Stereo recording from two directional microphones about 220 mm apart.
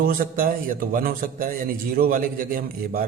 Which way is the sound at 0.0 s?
40° right (ahead or behind).